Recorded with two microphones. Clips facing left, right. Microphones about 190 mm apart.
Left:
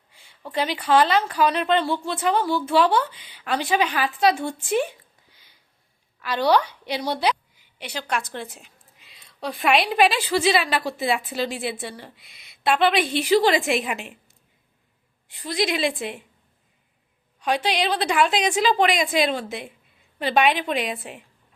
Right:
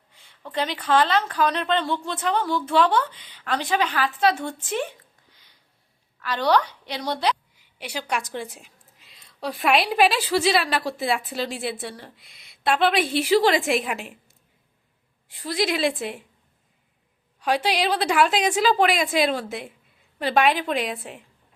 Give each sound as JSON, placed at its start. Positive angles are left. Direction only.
{"t": 0.1, "sound": "speech", "side_deg": 10}
{"t": 6.1, "sound": "a woman's voice", "side_deg": 10}
{"t": 7.6, "sound": "a woman's voice", "side_deg": -10}
{"t": 15.4, "sound": "a woman's voice", "side_deg": 0}
{"t": 17.4, "sound": "a woman's voice", "side_deg": -5}